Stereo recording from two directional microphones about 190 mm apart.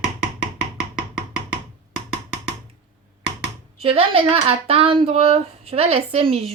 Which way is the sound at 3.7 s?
30° right (ahead or behind).